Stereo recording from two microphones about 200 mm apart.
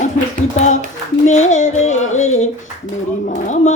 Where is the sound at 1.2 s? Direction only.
35° left (ahead or behind).